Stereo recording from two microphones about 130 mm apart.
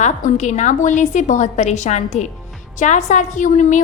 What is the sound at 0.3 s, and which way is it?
A woman's voice, 65° left (ahead or behind).